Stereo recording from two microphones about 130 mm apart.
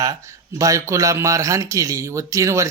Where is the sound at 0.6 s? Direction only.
25° right (ahead or behind).